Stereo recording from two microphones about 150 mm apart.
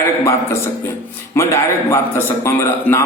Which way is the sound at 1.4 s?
20° left (ahead or behind).